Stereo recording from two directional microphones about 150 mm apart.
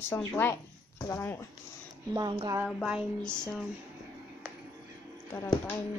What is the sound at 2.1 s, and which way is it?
Speech, 30° right (ahead or behind).